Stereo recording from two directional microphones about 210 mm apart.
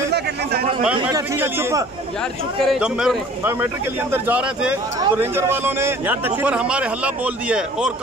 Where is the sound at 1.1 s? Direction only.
10° right (ahead or behind).